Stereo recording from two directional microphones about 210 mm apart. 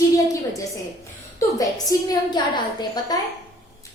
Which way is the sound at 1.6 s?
20° left (ahead or behind).